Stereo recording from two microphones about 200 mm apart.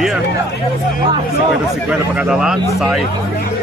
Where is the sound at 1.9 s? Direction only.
5° right (ahead or behind).